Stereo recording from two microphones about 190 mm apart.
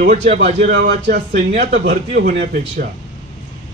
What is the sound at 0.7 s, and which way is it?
Speech, 60° right (ahead or behind).